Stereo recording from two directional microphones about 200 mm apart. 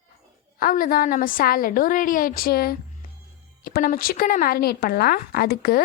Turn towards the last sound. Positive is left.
turn(degrees=50)  # may be behind; listen again after turning